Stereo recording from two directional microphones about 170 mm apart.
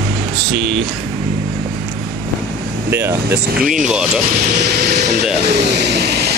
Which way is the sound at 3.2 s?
65° right (ahead or behind).